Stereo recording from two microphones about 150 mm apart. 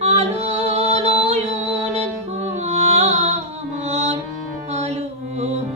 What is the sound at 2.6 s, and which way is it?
Music, 45° right (ahead or behind).